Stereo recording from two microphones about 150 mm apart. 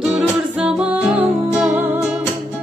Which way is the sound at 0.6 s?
10° right (ahead or behind).